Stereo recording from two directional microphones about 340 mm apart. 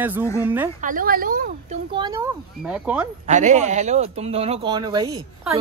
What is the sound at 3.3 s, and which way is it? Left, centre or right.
Speech, right.